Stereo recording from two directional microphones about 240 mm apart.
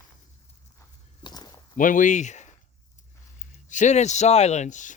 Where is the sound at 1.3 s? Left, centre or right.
Centre.